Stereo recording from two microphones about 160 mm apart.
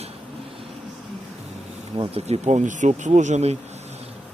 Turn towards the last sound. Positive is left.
turn(degrees=-45)  # may be behind; listen again after turning